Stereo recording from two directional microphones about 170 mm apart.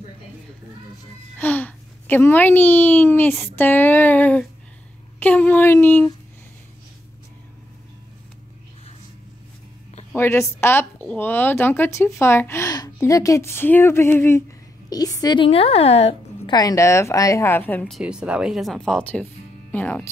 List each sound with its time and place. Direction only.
1.4 s a woman's voice: 10° left (ahead or behind)
10.1 s a woman's voice: 15° left (ahead or behind); by 16.5 s 35° left (ahead or behind)
16.5 s speech: 20° left (ahead or behind)